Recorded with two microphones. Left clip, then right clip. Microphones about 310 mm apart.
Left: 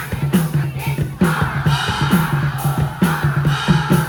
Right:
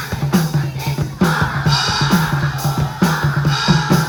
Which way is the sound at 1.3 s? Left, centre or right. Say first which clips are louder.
Right 3 dB; centre.